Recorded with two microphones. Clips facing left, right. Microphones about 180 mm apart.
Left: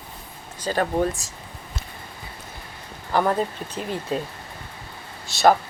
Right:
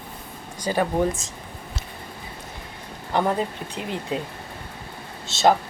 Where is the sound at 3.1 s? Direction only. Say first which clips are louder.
Left 1 dB; 20° right (ahead or behind).